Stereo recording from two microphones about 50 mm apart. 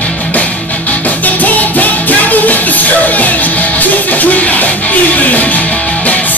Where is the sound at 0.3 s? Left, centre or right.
Left.